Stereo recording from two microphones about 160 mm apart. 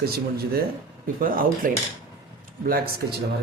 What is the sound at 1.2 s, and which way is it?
Speech, 60° right (ahead or behind).